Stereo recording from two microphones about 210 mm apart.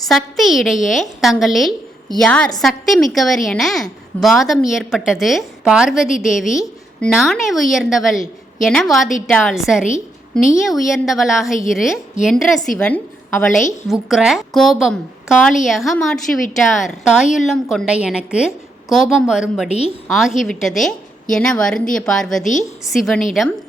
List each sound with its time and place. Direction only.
0.0 s a woman's voice: centre (ahead or behind)
19.6 s a woman's voice: 30° left (ahead or behind)
20.1 s a woman's voice: centre (ahead or behind)